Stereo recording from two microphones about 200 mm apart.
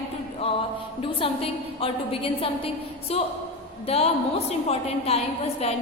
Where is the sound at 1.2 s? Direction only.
25° left (ahead or behind).